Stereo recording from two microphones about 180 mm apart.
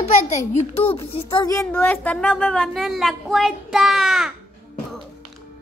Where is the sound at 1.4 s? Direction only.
20° left (ahead or behind).